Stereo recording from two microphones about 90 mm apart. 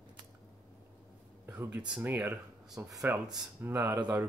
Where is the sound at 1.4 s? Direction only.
20° right (ahead or behind).